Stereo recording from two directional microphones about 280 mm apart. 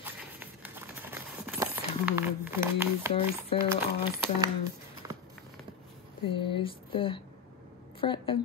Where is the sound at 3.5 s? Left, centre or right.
Centre.